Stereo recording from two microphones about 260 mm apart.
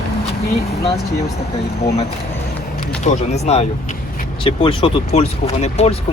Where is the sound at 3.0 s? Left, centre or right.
Left.